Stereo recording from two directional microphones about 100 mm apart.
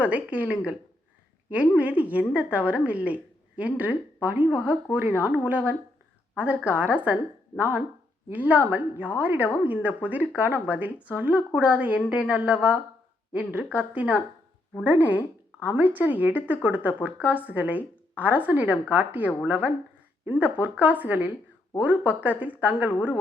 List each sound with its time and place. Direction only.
0.0 s a woman's voice: 15° right (ahead or behind)
13.3 s a woman's voice: 15° right (ahead or behind)